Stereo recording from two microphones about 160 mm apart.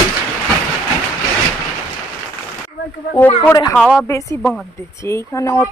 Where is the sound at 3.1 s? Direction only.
10° left (ahead or behind).